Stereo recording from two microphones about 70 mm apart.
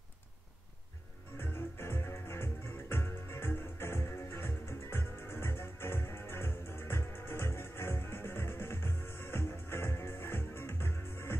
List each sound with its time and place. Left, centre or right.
1.4 s music: left